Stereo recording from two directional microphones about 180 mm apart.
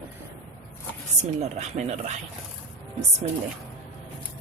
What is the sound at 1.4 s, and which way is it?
Speech, 35° right (ahead or behind).